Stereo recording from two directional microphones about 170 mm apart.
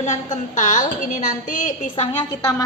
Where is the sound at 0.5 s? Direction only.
45° left (ahead or behind).